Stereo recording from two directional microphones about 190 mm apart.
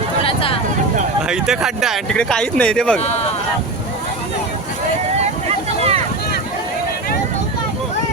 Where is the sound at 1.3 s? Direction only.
5° right (ahead or behind).